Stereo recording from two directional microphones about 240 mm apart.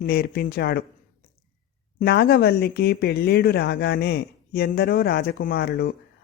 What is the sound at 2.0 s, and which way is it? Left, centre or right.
Speech, left.